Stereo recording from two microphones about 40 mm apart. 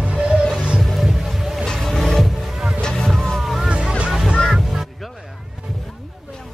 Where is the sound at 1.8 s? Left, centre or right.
Centre.